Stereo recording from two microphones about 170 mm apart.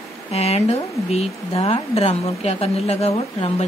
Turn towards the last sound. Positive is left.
turn(degrees=35)  # may be behind; listen again after turning